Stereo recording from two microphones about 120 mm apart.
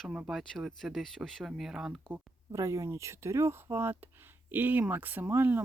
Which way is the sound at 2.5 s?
25° right (ahead or behind).